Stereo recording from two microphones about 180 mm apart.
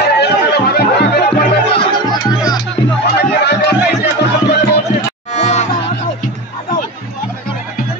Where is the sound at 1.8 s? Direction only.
25° left (ahead or behind).